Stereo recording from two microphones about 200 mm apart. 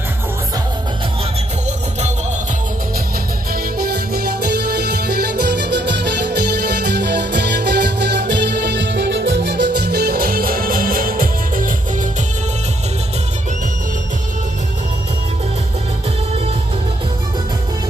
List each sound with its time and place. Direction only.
3.5 s music: 50° right (ahead or behind)